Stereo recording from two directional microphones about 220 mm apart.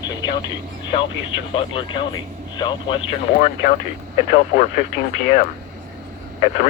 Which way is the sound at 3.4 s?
35° left (ahead or behind).